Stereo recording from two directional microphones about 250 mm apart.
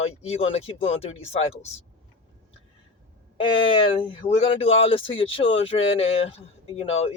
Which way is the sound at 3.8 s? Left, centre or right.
Left.